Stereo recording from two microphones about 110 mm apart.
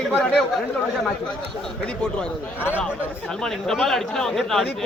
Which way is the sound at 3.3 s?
5° left (ahead or behind).